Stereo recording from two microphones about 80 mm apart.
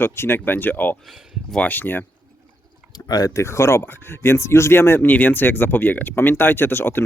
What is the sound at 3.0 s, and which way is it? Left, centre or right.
Speech, left.